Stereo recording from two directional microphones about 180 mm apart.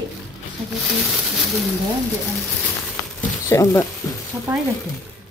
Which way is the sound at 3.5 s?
15° left (ahead or behind).